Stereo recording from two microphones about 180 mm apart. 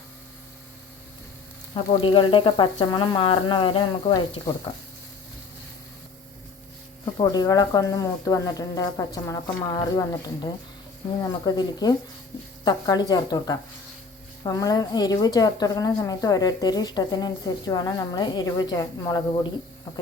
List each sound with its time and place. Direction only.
1.7 s speech: 30° left (ahead or behind)
7.0 s speech: 25° left (ahead or behind)